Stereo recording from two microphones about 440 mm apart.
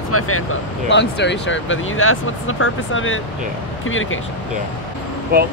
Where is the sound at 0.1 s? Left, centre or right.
Left.